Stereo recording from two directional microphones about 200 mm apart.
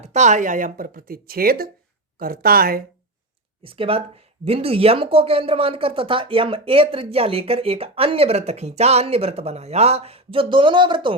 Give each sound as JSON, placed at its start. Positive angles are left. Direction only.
{"t": 0.0, "sound": "speech", "side_deg": -35}
{"t": 3.6, "sound": "speech", "side_deg": -25}